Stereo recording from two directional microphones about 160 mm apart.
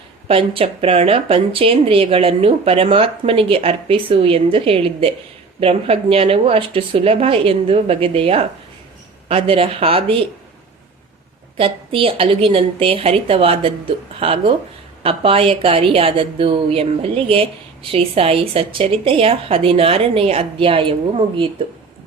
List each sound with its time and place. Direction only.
0.3 s a woman's voice: 35° right (ahead or behind)
11.5 s a woman's voice: 35° right (ahead or behind)